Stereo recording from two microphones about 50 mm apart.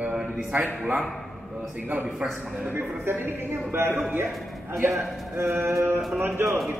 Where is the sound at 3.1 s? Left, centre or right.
Right.